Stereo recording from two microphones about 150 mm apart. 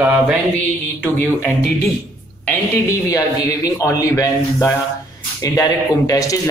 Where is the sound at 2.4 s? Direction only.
15° left (ahead or behind).